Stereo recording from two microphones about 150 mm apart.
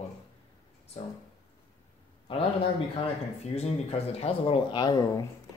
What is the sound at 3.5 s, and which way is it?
Speech, 45° left (ahead or behind).